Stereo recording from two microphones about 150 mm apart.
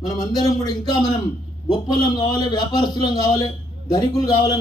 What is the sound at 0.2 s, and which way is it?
A man's voice, 25° left (ahead or behind).